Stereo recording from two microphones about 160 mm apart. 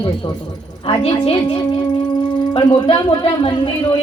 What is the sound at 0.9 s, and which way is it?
Speech, 35° left (ahead or behind).